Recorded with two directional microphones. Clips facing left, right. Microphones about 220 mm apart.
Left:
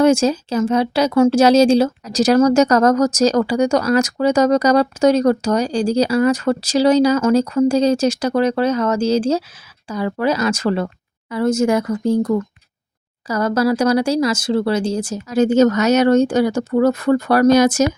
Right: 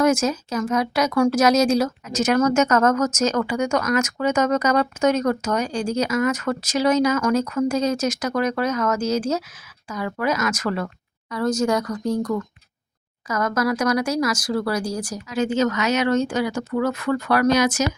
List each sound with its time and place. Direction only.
0.0 s speech: 30° left (ahead or behind)
15.3 s speech: 40° left (ahead or behind)